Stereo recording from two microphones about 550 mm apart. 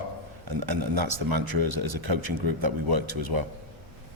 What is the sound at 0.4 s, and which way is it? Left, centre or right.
A man's voice, right.